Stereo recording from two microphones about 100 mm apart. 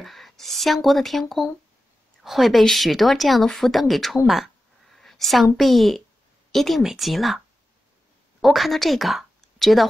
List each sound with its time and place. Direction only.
0.0 s a woman's voice: centre (ahead or behind)
2.2 s a woman's voice: centre (ahead or behind)